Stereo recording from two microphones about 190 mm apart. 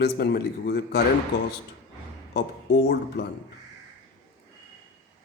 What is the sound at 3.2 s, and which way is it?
Speech, 65° left (ahead or behind).